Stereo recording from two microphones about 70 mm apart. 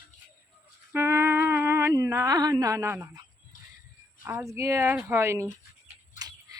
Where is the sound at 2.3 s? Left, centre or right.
Right.